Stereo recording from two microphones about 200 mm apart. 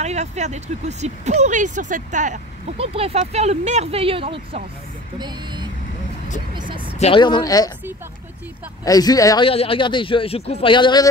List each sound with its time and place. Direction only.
0.0 s speech: 35° right (ahead or behind)
6.5 s speech: 25° right (ahead or behind)
7.0 s speech: 25° left (ahead or behind)
8.8 s speech: 20° left (ahead or behind)